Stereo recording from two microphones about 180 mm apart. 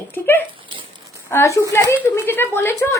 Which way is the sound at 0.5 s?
30° right (ahead or behind).